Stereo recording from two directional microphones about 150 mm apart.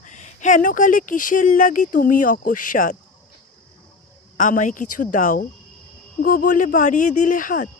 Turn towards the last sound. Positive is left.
turn(degrees=60)  # may be behind; listen again after turning